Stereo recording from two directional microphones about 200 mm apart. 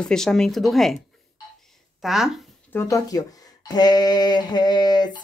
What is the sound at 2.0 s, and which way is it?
Speech, centre (ahead or behind).